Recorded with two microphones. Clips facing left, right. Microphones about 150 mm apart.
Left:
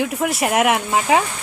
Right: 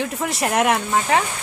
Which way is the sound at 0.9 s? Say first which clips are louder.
Left 2 dB; 15° left (ahead or behind).